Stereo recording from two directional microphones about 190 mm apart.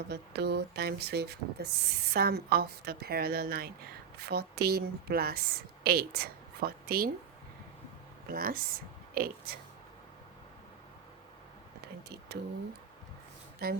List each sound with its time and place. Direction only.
0.1 s speech: 60° right (ahead or behind)
8.3 s speech: 50° right (ahead or behind)
11.8 s a sound: 60° right (ahead or behind)
13.6 s speech: 55° right (ahead or behind)